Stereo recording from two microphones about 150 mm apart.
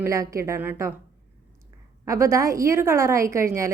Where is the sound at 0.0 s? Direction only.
20° right (ahead or behind).